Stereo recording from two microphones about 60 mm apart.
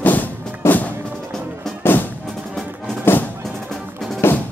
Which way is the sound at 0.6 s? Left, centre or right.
Left.